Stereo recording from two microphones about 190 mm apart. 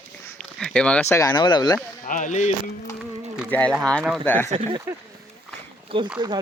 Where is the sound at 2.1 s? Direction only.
40° left (ahead or behind).